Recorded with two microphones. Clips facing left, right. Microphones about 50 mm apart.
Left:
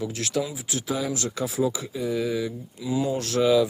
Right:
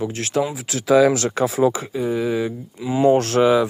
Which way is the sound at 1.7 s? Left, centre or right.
Right.